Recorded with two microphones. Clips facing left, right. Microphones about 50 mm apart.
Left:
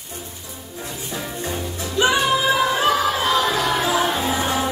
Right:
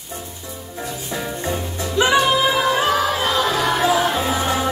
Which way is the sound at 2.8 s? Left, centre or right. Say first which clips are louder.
Even; centre.